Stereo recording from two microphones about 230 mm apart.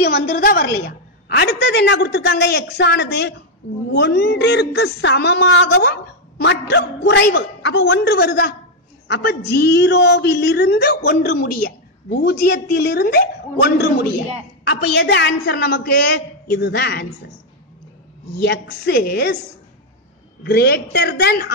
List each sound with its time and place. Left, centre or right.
0.0 s a woman's voice: left
18.4 s a woman's voice: left
20.4 s a woman's voice: left